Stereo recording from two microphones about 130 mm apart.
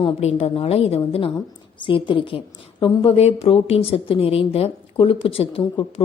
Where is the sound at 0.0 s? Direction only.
50° left (ahead or behind).